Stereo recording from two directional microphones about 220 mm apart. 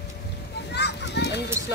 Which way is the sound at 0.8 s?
50° left (ahead or behind).